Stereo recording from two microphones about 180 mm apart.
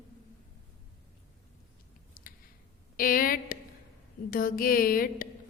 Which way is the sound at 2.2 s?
55° left (ahead or behind).